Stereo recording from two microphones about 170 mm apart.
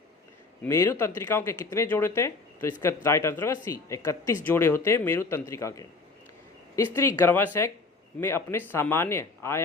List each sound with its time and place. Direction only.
0.6 s speech: 15° left (ahead or behind)